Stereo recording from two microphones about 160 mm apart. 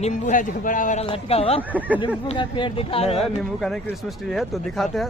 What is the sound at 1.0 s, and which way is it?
Speech, 35° left (ahead or behind).